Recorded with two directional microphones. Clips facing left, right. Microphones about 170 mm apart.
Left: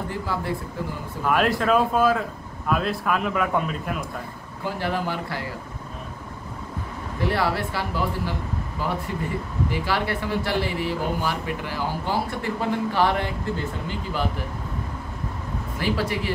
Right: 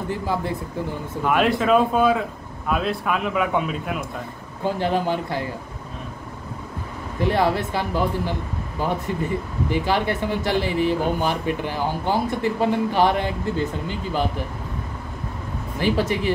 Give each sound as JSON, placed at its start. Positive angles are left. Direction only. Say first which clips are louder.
{"t": 0.1, "sound": "speech", "louder": "right 5 dB", "side_deg": -20}
{"t": 1.2, "sound": "speech", "louder": "right 2 dB", "side_deg": 0}
{"t": 4.6, "sound": "speech", "louder": "right 5 dB", "side_deg": -20}
{"t": 7.2, "sound": "speech", "louder": "right 4 dB", "side_deg": -20}
{"t": 15.8, "sound": "speech", "louder": "right 4 dB", "side_deg": -20}